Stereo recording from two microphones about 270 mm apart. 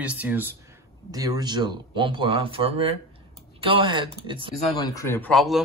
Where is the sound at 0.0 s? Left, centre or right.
Centre.